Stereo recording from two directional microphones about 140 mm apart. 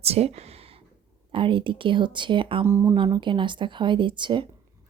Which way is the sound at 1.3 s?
35° right (ahead or behind).